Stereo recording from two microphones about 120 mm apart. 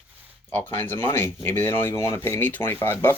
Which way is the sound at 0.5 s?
15° left (ahead or behind).